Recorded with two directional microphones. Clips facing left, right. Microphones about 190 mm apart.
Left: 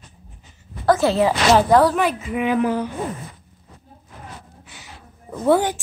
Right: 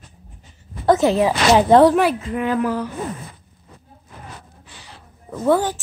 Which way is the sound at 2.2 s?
15° left (ahead or behind).